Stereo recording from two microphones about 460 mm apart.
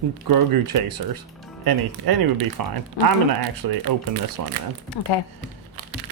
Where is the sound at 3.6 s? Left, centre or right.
Right.